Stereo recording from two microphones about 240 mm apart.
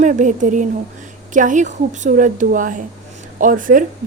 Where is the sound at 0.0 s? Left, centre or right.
Right.